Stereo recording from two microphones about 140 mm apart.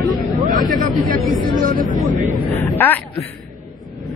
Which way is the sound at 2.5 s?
15° left (ahead or behind).